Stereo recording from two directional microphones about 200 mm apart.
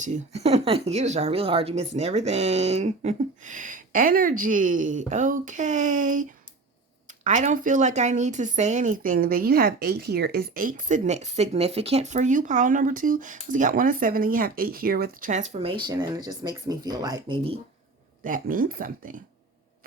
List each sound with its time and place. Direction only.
0.0 s speech: 35° right (ahead or behind)
18.2 s speech: 45° right (ahead or behind)